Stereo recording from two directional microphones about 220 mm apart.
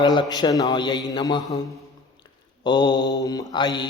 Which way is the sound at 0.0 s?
20° left (ahead or behind).